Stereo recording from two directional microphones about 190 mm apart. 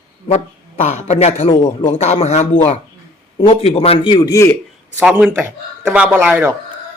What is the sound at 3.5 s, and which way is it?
A man's voice, 30° left (ahead or behind).